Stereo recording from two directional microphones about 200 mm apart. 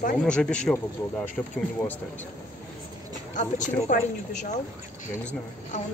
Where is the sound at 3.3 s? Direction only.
40° left (ahead or behind).